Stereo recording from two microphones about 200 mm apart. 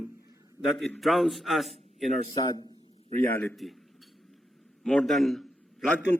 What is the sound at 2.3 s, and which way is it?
Speech, 20° left (ahead or behind).